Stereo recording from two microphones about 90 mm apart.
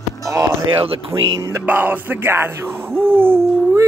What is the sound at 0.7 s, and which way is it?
Speech, 90° right.